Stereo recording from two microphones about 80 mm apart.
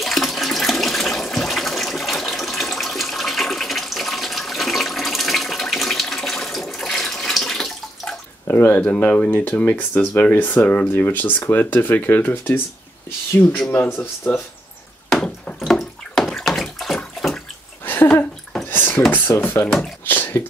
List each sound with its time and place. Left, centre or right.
0.0 s toilet flush: centre
8.5 s speech: left
13.9 s speech: left
15.0 s bathtub: centre
17.8 s a sound: left
19.0 s speech: left